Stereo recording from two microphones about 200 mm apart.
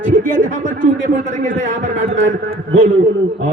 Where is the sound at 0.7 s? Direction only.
40° right (ahead or behind).